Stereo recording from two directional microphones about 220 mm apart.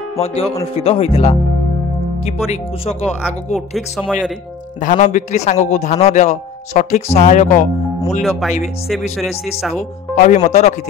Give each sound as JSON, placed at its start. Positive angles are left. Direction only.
{"t": 0.2, "sound": "speech", "side_deg": 25}
{"t": 3.7, "sound": "speech", "side_deg": 5}
{"t": 4.8, "sound": "a man's voice", "side_deg": 35}
{"t": 8.2, "sound": "speech", "side_deg": 0}
{"t": 10.1, "sound": "a man's voice", "side_deg": 30}